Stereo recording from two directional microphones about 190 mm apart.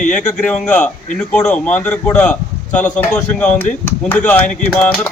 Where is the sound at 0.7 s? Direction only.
5° left (ahead or behind).